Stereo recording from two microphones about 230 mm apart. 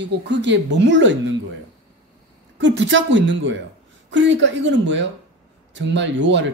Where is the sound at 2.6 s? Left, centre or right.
Right.